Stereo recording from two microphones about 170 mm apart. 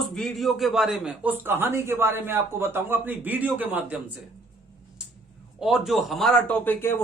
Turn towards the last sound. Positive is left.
turn(degrees=10)  # may be behind; listen again after turning